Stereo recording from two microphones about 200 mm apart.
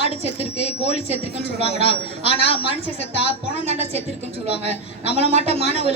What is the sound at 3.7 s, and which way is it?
A woman's voice, 30° right (ahead or behind).